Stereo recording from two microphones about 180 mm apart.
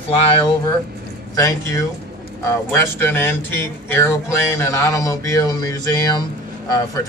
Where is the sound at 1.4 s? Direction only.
15° left (ahead or behind).